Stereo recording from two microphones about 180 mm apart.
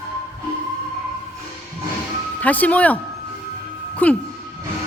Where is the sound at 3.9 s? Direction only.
10° left (ahead or behind).